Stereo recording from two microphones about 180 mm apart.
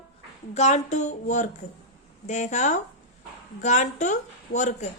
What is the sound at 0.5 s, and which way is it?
A woman's voice, 40° left (ahead or behind).